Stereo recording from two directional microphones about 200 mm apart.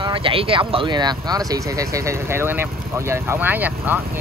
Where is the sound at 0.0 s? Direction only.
25° right (ahead or behind).